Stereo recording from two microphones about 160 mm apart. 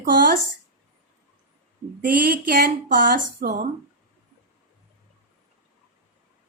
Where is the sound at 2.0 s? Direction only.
65° right (ahead or behind).